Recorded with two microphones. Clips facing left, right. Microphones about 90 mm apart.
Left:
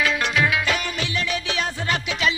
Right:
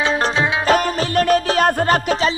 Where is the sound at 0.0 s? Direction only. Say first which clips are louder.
Right 3 dB; 35° right (ahead or behind).